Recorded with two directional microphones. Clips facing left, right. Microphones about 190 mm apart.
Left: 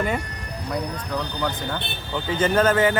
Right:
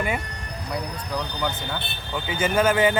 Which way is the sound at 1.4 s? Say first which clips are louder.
Left 2 dB; 5° right (ahead or behind).